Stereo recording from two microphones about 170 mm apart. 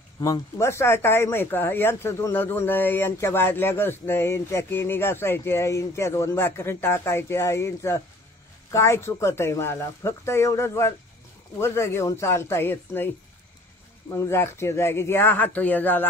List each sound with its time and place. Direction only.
0.2 s speech: 20° left (ahead or behind)
14.1 s speech: 15° left (ahead or behind)